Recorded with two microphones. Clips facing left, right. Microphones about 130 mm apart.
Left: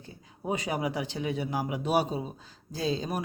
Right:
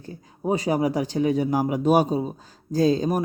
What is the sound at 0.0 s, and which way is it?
Speech, 35° right (ahead or behind).